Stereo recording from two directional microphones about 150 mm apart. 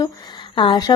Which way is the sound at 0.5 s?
35° left (ahead or behind).